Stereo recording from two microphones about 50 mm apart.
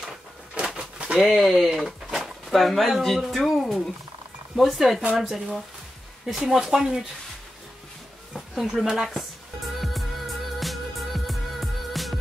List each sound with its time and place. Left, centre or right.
0.6 s pigeon: right
1.2 s speech: centre
1.7 s drawer open or close: centre
3.3 s speech: centre
8.3 s a sound: centre
8.8 s music: centre